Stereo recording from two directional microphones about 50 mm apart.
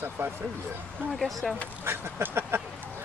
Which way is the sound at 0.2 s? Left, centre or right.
Right.